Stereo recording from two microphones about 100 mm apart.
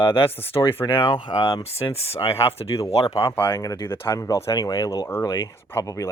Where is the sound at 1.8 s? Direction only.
85° left.